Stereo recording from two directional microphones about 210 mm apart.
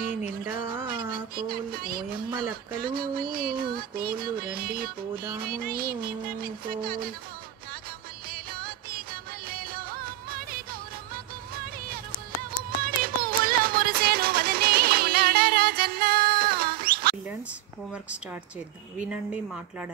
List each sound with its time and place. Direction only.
1.3 s music: 45° right (ahead or behind)
8.3 s music: 45° right (ahead or behind)
9.5 s music of bollywood: 45° right (ahead or behind)
12.8 s music: 45° right (ahead or behind)
19.0 s a woman's voice: 5° right (ahead or behind)